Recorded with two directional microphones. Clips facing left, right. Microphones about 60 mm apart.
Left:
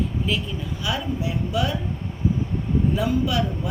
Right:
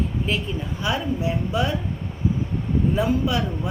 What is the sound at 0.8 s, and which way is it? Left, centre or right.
Speech, right.